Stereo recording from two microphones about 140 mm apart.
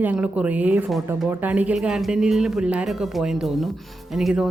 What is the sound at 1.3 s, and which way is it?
Speech, 10° right (ahead or behind).